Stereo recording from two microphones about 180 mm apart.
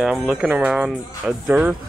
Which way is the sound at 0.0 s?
5° right (ahead or behind).